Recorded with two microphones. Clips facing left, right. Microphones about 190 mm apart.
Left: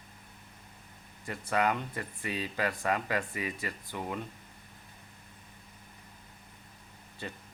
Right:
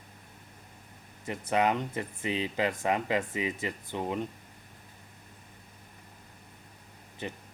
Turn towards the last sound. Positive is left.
turn(degrees=-20)  # may be behind; listen again after turning